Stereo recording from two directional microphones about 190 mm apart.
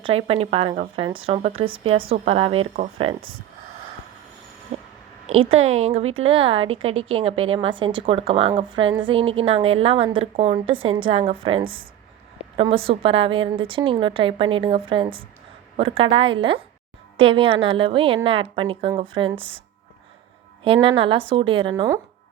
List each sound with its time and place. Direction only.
0.0 s a woman's voice: 30° right (ahead or behind)
4.7 s a sound: 35° right (ahead or behind)
5.3 s a woman's voice: 90° right
5.5 s a woman's voice: 35° right (ahead or behind)
20.8 s a woman's voice: 30° right (ahead or behind)